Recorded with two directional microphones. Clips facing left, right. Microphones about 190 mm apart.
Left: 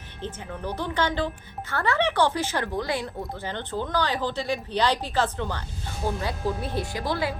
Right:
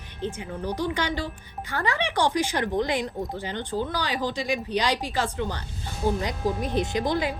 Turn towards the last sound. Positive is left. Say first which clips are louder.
# right 3 dB
turn(degrees=-20)  # may be behind; listen again after turning